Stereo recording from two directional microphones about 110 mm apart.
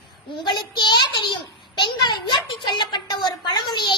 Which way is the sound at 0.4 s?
45° left (ahead or behind).